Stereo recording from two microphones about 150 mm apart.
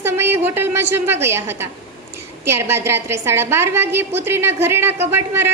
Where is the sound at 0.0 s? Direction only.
15° right (ahead or behind).